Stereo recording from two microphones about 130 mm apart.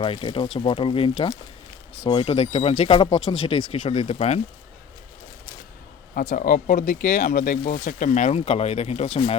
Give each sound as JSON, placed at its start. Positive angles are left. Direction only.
{"t": 0.0, "sound": "speech", "side_deg": 40}
{"t": 6.1, "sound": "speech", "side_deg": 90}